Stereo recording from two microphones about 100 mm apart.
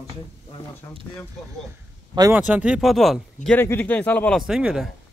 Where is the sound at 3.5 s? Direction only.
20° left (ahead or behind).